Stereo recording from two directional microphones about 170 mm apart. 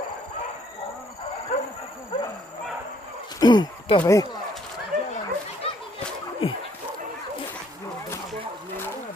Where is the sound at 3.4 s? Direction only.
25° left (ahead or behind).